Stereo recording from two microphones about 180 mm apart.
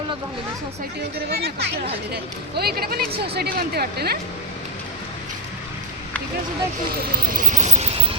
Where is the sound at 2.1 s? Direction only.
60° right (ahead or behind).